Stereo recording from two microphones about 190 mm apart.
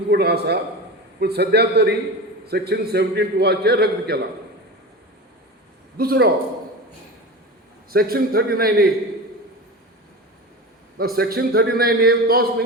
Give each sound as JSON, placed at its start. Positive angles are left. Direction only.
{"t": 0.1, "sound": "a man's voice", "side_deg": -60}
{"t": 6.0, "sound": "a man's voice", "side_deg": -55}
{"t": 7.9, "sound": "a man's voice", "side_deg": -50}
{"t": 10.9, "sound": "a man's voice", "side_deg": -55}